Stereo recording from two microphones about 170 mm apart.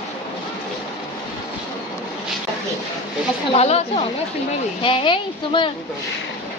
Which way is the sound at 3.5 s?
40° left (ahead or behind).